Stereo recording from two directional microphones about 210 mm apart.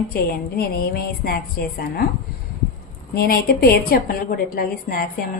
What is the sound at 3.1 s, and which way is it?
A woman's voice, 45° left (ahead or behind).